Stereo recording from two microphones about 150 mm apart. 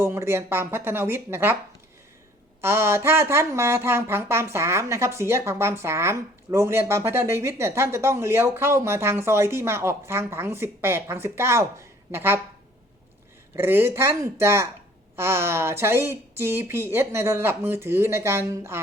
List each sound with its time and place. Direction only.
0.0 s speech: 15° right (ahead or behind)
2.6 s speech: 15° right (ahead or behind)
13.6 s speech: 15° right (ahead or behind)